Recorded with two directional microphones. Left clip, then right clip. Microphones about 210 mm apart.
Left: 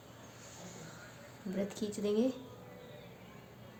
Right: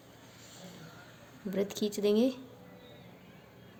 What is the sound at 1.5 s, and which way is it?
Speech, 45° right (ahead or behind).